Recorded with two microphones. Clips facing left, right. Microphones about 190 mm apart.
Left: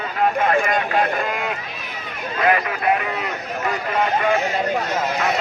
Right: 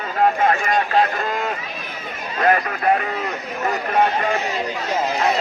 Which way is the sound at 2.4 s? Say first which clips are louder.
Right 1 dB; 40° right (ahead or behind).